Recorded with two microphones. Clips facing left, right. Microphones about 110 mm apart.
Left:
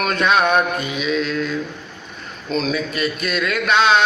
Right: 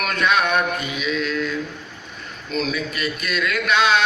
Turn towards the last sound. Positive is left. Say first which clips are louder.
# left 3 dB
turn(degrees=30)  # may be behind; listen again after turning